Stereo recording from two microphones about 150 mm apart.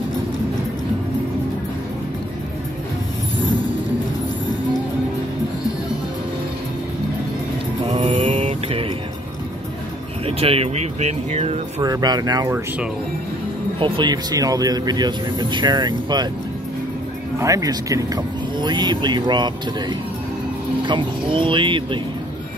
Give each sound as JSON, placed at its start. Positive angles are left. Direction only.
{"t": 8.0, "sound": "mantra", "side_deg": -40}
{"t": 10.2, "sound": "speech", "side_deg": -40}
{"t": 11.8, "sound": "speech", "side_deg": -25}
{"t": 13.7, "sound": "speech", "side_deg": -35}
{"t": 17.4, "sound": "speech", "side_deg": -20}